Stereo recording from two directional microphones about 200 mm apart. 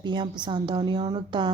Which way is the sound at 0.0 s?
20° right (ahead or behind).